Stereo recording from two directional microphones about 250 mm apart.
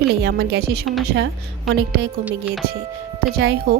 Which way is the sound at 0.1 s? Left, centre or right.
Right.